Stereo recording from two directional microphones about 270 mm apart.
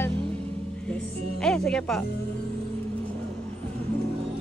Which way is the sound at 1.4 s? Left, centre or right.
Centre.